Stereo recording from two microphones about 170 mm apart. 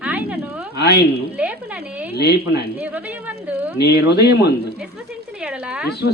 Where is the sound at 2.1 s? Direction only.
75° left (ahead or behind).